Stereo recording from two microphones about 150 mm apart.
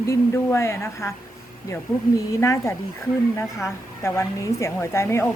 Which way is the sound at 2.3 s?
20° left (ahead or behind).